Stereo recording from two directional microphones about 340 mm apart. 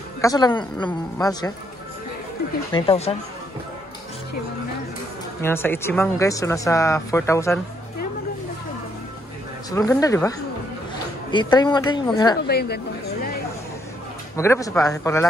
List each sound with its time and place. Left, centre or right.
0.2 s speech: centre
2.7 s speech: centre
5.4 s speech: centre
9.7 s speech: centre
11.3 s speech: centre
12.4 s speech: left
14.3 s speech: centre